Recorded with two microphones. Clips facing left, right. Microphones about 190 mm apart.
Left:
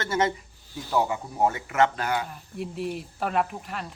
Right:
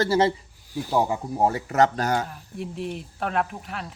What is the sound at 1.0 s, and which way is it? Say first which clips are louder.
Speech: right 2 dB; 30° right (ahead or behind).